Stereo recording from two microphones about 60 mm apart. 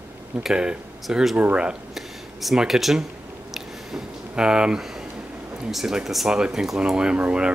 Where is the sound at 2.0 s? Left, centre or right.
Centre.